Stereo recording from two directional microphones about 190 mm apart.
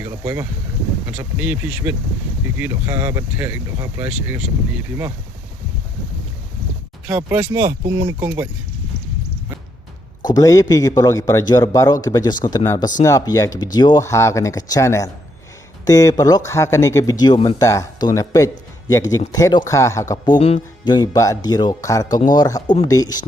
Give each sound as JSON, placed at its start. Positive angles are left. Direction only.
{"t": 0.0, "sound": "speech", "side_deg": -15}
{"t": 7.1, "sound": "speech", "side_deg": -10}
{"t": 10.3, "sound": "speech", "side_deg": 20}